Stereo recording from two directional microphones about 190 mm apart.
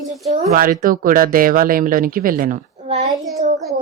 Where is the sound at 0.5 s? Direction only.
50° right (ahead or behind).